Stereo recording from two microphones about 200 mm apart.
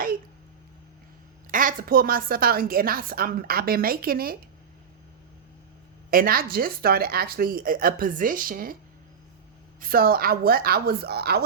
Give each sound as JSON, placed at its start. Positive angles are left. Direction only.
{"t": 1.5, "sound": "a woman's voice", "side_deg": -45}
{"t": 6.1, "sound": "a woman's voice", "side_deg": -45}
{"t": 9.8, "sound": "a woman's voice", "side_deg": -45}